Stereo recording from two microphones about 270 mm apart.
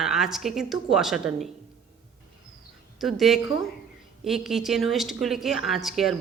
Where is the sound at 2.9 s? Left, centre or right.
Centre.